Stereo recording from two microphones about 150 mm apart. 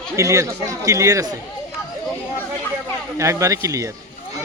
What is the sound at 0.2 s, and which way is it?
Speech, 20° right (ahead or behind).